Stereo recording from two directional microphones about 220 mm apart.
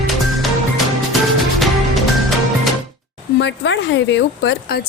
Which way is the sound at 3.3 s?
55° left (ahead or behind).